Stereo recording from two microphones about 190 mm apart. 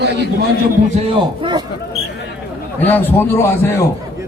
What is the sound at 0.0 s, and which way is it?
Speech, 60° right (ahead or behind).